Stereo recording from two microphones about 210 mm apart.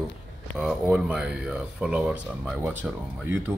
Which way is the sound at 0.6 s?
5° right (ahead or behind).